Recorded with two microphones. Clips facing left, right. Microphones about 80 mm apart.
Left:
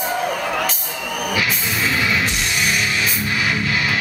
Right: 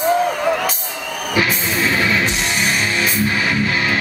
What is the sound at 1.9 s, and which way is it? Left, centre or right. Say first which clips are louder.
Music: right 2 dB; right.